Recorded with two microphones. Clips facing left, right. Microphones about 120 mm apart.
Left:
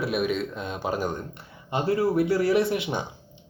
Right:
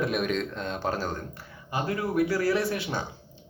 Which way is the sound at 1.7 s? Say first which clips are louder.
Left 4 dB; 30° left (ahead or behind).